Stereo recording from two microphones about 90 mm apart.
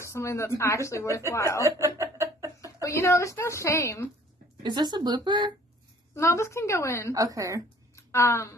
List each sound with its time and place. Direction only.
0.0 s speech: 30° left (ahead or behind)
1.6 s a sound: 35° right (ahead or behind)
2.8 s speech: 30° left (ahead or behind)
4.6 s speech: 50° right (ahead or behind)
6.1 s speech: 30° left (ahead or behind)
7.2 s speech: 40° right (ahead or behind)
7.9 s a sound: 30° left (ahead or behind)